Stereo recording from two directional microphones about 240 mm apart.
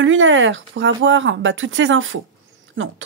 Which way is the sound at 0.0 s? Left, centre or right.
Right.